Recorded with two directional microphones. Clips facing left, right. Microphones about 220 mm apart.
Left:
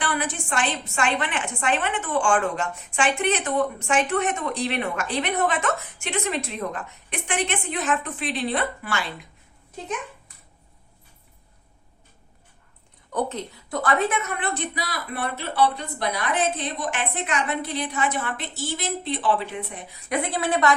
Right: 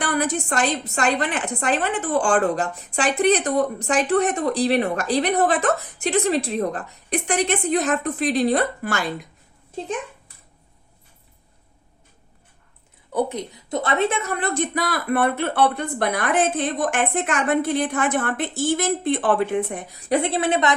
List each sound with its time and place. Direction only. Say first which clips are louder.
0.0 s a woman's voice: right 5 dB; 40° right (ahead or behind)
13.1 s a woman's voice: right 3 dB; 15° right (ahead or behind); by 19.9 s 50° right (ahead or behind)
20.1 s a woman's voice: right 5 dB; 25° right (ahead or behind)